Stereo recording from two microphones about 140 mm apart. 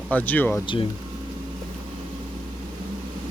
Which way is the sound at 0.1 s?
10° left (ahead or behind).